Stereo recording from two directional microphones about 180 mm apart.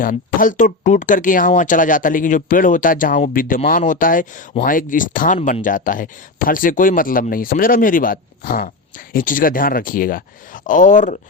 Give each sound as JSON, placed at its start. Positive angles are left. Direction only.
{"t": 0.0, "sound": "speech", "side_deg": 50}